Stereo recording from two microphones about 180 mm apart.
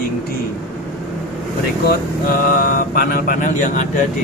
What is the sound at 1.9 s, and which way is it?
Speech, 55° left (ahead or behind).